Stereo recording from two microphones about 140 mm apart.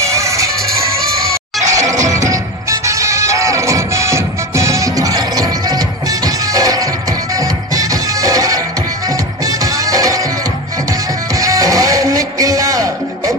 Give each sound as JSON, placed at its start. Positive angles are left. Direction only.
{"t": 0.0, "sound": "music", "side_deg": -20}
{"t": 1.7, "sound": "music", "side_deg": -25}